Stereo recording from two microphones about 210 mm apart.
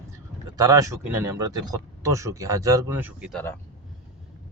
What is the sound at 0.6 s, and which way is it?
Speech, 15° right (ahead or behind).